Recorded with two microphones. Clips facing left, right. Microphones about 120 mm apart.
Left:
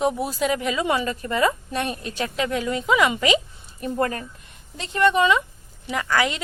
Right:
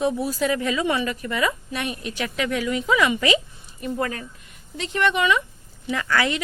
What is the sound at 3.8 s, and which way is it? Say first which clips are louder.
Speech: left 2 dB; 45° left (ahead or behind).